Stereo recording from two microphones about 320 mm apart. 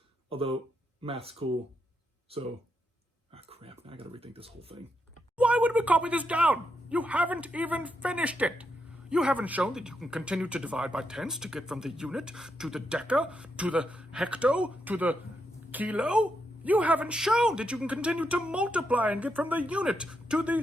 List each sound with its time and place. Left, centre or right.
0.3 s speech: centre
5.4 s speech: centre